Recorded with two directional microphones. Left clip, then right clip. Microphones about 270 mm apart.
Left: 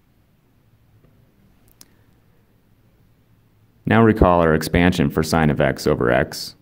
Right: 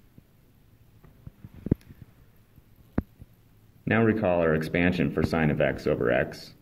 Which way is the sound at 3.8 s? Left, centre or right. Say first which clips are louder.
Left 9 dB; left.